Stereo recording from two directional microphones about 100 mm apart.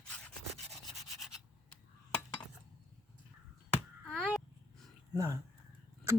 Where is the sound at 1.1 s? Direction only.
Centre (ahead or behind).